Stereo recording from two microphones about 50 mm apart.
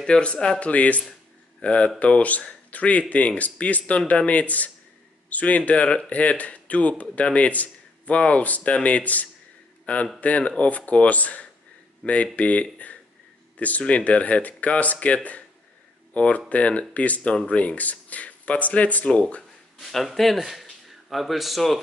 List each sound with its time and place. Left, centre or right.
0.0 s speech: centre
19.8 s speech: centre